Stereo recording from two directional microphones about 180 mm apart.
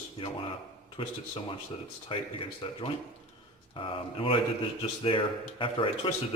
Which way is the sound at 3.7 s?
30° left (ahead or behind).